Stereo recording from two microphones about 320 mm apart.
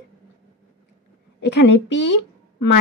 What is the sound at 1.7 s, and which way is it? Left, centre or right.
Speech, left.